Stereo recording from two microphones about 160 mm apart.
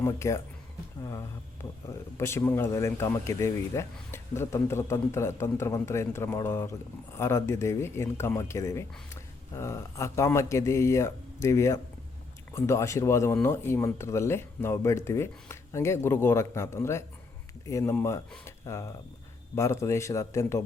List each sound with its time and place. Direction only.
0.0 s speech: 15° left (ahead or behind)
2.1 s speech: 15° left (ahead or behind)